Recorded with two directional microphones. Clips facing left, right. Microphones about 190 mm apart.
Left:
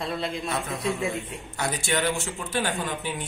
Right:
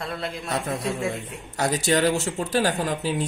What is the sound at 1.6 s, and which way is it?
Speech, 40° right (ahead or behind).